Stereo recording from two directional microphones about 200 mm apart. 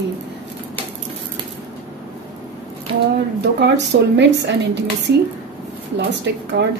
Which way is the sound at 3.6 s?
60° right (ahead or behind).